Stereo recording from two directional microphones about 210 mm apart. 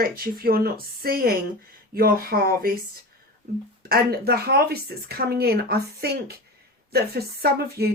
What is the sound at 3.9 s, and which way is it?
Speech, 50° right (ahead or behind).